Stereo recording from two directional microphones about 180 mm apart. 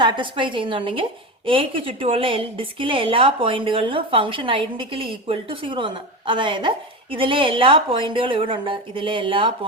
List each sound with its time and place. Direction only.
0.0 s a woman's voice: 25° right (ahead or behind)